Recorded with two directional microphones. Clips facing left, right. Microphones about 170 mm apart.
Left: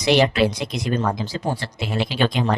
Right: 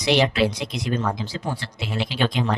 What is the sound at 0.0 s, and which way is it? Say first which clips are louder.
Speech: left 2 dB; 45° left (ahead or behind).